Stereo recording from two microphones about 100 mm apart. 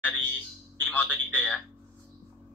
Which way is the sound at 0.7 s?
15° left (ahead or behind).